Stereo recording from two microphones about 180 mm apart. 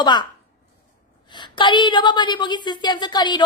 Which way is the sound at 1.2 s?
25° left (ahead or behind).